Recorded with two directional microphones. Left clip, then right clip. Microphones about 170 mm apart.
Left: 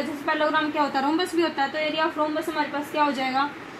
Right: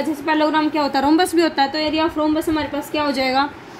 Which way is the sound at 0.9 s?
65° right (ahead or behind).